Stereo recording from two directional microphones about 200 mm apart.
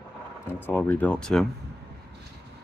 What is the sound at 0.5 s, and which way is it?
Speech, 10° left (ahead or behind).